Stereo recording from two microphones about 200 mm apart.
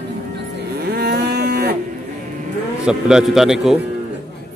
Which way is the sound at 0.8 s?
50° right (ahead or behind).